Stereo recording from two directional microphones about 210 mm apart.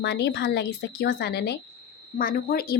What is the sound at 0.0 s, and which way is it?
Speech, 55° left (ahead or behind).